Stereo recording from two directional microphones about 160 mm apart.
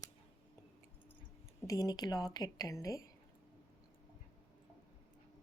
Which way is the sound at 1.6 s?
20° left (ahead or behind).